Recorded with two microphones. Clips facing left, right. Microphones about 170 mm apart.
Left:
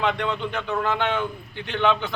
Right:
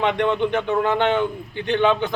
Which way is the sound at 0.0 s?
15° right (ahead or behind).